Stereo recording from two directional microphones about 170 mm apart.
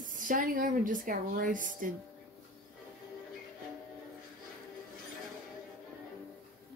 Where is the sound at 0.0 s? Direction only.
50° right (ahead or behind).